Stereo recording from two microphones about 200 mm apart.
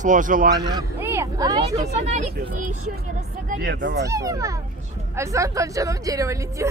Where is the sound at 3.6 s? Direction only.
60° right (ahead or behind).